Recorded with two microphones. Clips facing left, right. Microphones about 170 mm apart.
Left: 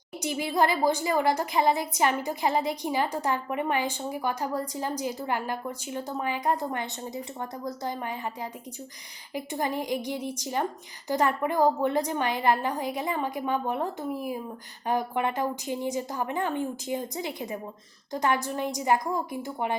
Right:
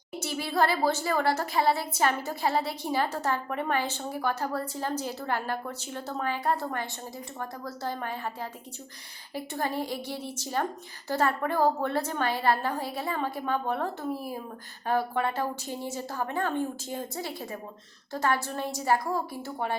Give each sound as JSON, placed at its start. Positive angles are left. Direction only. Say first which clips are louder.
{"t": 0.2, "sound": "a woman's voice", "louder": "left 2 dB", "side_deg": 15}